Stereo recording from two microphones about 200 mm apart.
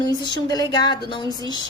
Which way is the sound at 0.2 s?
65° right (ahead or behind).